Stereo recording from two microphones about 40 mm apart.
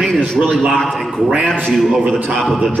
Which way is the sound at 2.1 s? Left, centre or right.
Centre.